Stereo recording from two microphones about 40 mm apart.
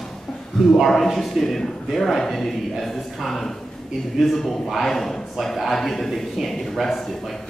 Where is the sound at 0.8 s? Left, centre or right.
Centre.